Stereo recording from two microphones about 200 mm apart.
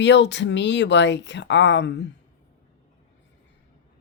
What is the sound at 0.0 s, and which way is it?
Speech, 60° left (ahead or behind).